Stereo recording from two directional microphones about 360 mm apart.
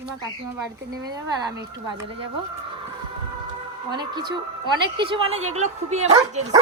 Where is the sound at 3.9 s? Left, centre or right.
Centre.